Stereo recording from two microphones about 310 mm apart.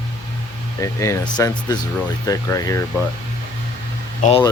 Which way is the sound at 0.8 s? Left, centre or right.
Centre.